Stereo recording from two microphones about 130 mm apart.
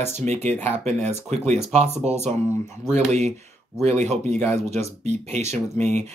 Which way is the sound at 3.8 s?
60° right (ahead or behind).